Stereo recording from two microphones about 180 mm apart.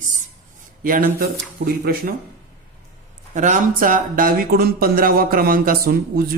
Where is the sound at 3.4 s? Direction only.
45° right (ahead or behind).